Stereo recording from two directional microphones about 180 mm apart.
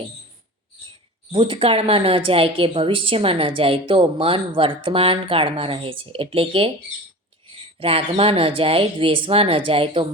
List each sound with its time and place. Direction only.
1.3 s a woman's voice: 30° right (ahead or behind)
7.8 s a woman's voice: 30° right (ahead or behind)